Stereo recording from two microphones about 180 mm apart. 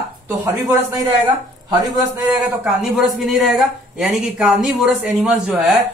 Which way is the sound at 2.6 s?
Centre (ahead or behind).